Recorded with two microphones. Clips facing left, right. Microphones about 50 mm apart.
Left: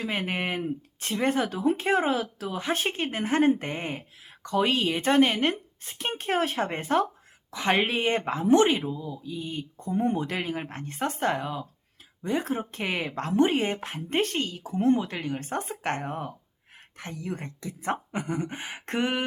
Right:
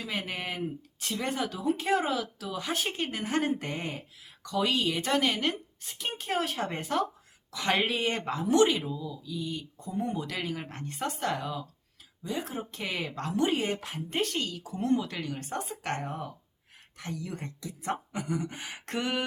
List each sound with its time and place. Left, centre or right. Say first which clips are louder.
0.0 s speech: left 5 dB; left
12.2 s speech: left 6 dB; left